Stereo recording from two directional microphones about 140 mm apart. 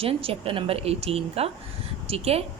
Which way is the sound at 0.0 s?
45° right (ahead or behind).